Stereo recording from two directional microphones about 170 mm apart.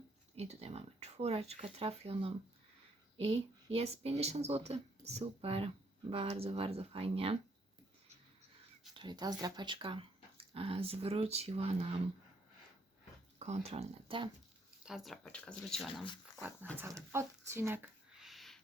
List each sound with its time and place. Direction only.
0.3 s speech: 40° right (ahead or behind)
9.0 s speech: 25° right (ahead or behind)
13.4 s speech: 40° right (ahead or behind)
14.8 s speech: centre (ahead or behind)
16.2 s speech: 10° right (ahead or behind)
18.2 s a sound: centre (ahead or behind)